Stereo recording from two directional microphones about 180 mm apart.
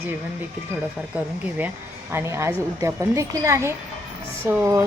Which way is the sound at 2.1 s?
15° right (ahead or behind).